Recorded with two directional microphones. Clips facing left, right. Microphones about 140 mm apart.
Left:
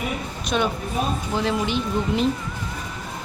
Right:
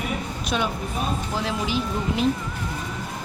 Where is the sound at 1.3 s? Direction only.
5° right (ahead or behind).